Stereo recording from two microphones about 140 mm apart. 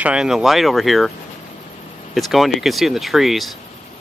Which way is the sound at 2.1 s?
Centre (ahead or behind).